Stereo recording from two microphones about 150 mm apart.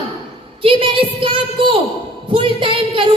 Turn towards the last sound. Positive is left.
turn(degrees=-35)  # may be behind; listen again after turning